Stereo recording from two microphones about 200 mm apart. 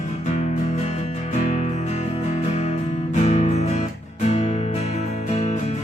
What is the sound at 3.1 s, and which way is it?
Music, 35° left (ahead or behind).